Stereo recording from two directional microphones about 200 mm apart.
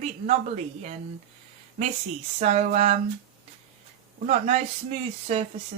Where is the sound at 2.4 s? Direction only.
35° right (ahead or behind).